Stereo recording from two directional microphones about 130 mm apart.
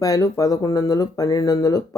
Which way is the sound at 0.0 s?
25° left (ahead or behind).